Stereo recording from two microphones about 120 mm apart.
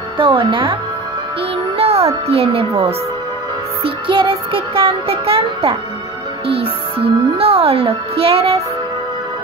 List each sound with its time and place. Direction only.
0.2 s music: 45° right (ahead or behind)
1.8 s a child's voice: 55° right (ahead or behind)
3.8 s music: 45° right (ahead or behind)
6.4 s speech: 50° right (ahead or behind)